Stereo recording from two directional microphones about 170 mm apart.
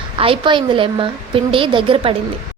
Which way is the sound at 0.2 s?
30° right (ahead or behind).